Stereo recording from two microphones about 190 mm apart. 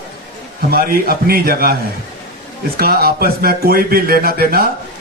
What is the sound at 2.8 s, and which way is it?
Speech, 55° right (ahead or behind).